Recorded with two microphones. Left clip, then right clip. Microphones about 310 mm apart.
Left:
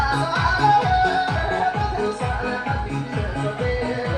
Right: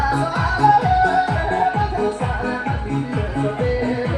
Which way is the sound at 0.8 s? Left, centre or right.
Centre.